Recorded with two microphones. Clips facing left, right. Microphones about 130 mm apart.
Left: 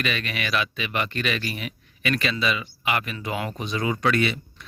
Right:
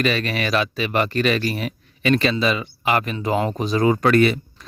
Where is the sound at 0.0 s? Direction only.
35° right (ahead or behind).